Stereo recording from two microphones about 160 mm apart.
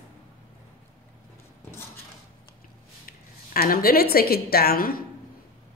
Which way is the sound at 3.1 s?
65° left (ahead or behind).